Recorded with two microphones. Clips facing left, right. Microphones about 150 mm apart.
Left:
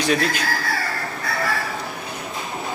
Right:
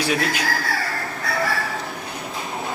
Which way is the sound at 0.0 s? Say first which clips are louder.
Left 2 dB; 10° right (ahead or behind).